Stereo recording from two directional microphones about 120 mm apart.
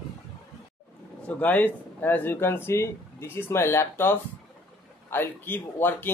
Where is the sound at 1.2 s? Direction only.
15° left (ahead or behind).